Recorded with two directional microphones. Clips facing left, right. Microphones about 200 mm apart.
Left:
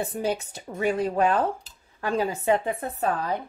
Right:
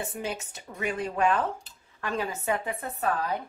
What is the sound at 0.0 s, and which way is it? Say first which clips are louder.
Speech: left 6 dB; 35° left (ahead or behind).